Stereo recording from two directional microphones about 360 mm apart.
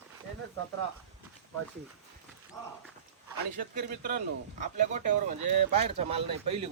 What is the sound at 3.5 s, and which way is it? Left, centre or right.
Speech, right.